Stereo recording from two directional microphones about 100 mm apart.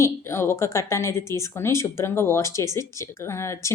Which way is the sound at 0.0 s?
25° left (ahead or behind).